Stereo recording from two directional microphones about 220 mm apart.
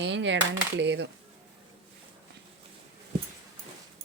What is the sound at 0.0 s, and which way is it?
A woman's voice, 55° right (ahead or behind).